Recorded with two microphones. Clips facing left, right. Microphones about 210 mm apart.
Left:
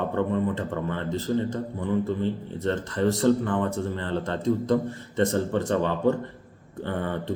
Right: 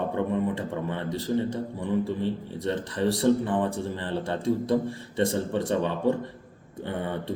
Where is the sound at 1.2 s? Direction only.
15° right (ahead or behind).